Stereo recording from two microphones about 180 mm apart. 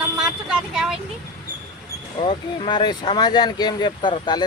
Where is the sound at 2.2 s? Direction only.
25° left (ahead or behind).